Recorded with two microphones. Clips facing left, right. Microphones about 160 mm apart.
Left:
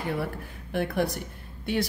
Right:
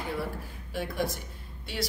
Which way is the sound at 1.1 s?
55° left (ahead or behind).